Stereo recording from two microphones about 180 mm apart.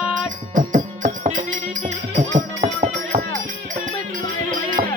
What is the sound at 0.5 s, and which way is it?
Music, 45° right (ahead or behind).